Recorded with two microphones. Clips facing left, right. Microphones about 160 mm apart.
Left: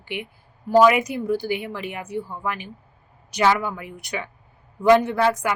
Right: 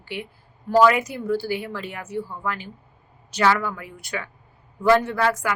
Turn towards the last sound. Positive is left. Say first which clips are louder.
# left 2 dB
turn(degrees=20)  # may be behind; listen again after turning